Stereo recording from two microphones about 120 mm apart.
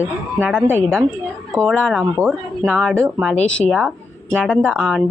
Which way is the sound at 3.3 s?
10° left (ahead or behind).